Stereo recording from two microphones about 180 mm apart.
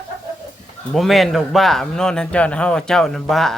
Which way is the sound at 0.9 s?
Centre (ahead or behind).